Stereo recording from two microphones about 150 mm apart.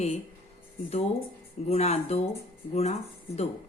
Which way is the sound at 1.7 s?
45° left (ahead or behind).